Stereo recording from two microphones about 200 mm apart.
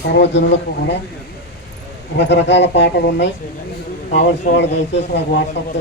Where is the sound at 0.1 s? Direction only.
60° left (ahead or behind).